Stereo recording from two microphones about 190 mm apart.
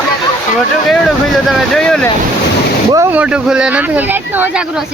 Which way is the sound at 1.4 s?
Centre (ahead or behind).